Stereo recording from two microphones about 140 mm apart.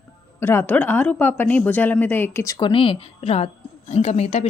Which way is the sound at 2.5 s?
35° left (ahead or behind).